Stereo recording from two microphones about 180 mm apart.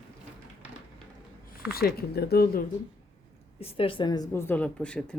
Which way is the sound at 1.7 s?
60° left (ahead or behind).